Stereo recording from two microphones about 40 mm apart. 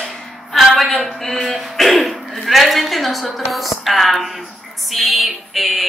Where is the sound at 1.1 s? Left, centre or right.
Centre.